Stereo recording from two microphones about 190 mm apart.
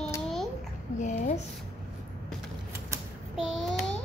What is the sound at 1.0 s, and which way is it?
Speech, 40° left (ahead or behind).